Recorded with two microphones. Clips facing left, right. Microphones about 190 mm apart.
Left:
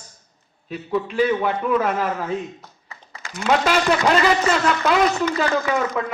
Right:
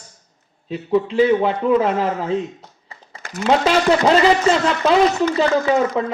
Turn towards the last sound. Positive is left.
turn(degrees=-30)  # may be behind; listen again after turning